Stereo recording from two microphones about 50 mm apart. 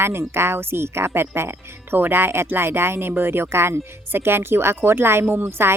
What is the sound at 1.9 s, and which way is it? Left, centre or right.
Speech, right.